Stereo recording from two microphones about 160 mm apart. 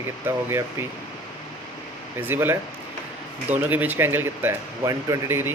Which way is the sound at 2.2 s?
15° right (ahead or behind).